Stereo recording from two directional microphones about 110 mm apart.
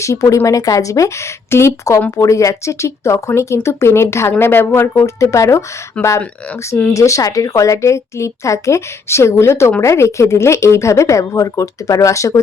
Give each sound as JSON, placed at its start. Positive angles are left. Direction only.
{"t": 0.0, "sound": "speech", "side_deg": 30}
{"t": 6.9, "sound": "speech", "side_deg": 30}